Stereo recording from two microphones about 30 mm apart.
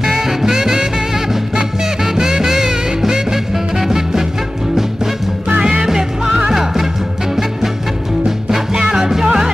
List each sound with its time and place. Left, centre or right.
0.0 s music: centre
5.6 s music: right
8.5 s music: centre